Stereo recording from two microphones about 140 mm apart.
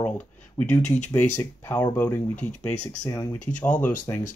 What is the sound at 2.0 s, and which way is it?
Speech, 10° left (ahead or behind).